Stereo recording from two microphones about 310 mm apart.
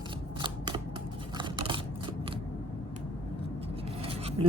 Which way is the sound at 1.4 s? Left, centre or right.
Centre.